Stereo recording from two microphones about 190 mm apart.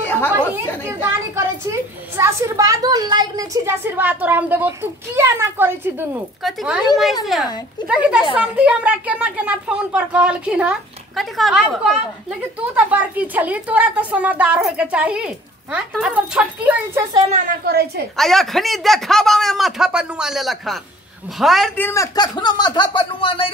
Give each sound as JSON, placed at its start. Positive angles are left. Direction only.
{"t": 0.0, "sound": "chatter", "side_deg": 10}
{"t": 0.8, "sound": "a woman's voice", "side_deg": -15}
{"t": 7.9, "sound": "a woman's voice", "side_deg": -5}
{"t": 17.3, "sound": "a woman's voice", "side_deg": -45}
{"t": 18.1, "sound": "speech", "side_deg": 0}